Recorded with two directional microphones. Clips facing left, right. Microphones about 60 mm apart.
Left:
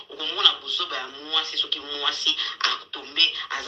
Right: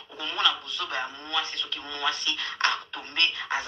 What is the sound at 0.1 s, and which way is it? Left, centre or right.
Speech, right.